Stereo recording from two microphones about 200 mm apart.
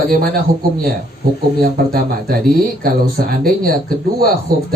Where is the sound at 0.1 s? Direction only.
45° right (ahead or behind).